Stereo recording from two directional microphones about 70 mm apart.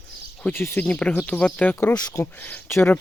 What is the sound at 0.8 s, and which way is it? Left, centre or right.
Speech, centre.